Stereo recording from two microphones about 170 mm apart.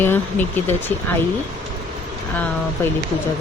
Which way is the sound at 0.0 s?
10° left (ahead or behind).